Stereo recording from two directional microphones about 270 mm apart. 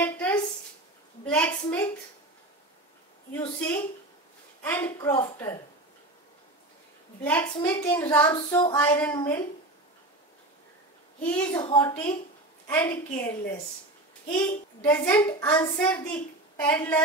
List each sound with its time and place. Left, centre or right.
0.0 s a sound: centre
1.2 s a child's voice: centre
3.3 s a child's voice: centre
7.2 s a child's voice: centre
11.2 s a child's voice: centre
11.6 s a child's voice: centre